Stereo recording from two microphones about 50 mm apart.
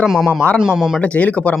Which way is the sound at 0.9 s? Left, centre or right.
Left.